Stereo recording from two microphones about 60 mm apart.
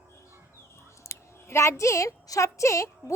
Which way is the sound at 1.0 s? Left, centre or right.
Left.